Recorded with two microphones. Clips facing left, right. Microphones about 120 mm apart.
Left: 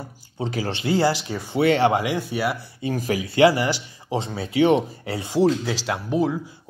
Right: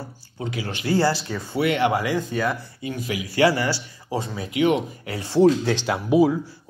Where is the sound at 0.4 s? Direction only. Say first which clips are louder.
Left 3 dB; 35° left (ahead or behind).